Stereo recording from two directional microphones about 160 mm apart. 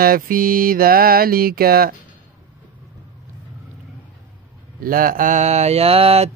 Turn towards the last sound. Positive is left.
turn(degrees=-40)  # may be behind; listen again after turning